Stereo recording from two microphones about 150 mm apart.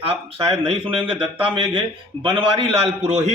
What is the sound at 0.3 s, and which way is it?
A man's voice, 40° right (ahead or behind).